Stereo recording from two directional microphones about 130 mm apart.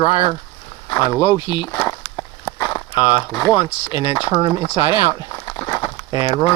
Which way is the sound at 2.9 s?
35° left (ahead or behind).